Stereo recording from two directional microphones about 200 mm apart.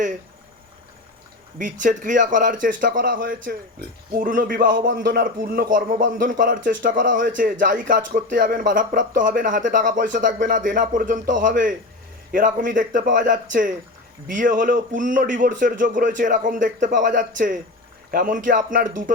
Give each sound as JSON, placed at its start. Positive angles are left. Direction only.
{"t": 1.5, "sound": "a man's voice", "side_deg": -40}